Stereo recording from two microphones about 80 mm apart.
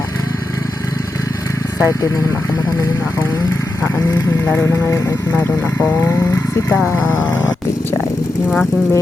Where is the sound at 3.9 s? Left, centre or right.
Left.